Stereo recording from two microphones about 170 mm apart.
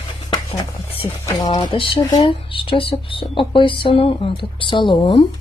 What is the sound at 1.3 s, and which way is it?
Speech, 25° left (ahead or behind).